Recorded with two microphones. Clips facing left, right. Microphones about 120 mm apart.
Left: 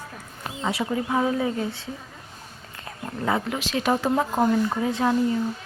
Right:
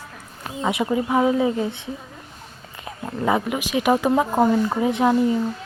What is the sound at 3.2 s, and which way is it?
A woman's voice, 15° right (ahead or behind).